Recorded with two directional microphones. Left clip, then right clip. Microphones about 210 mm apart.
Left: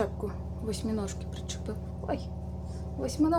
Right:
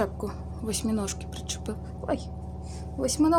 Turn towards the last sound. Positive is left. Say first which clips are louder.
# right 4 dB
turn(degrees=-45)  # may be behind; listen again after turning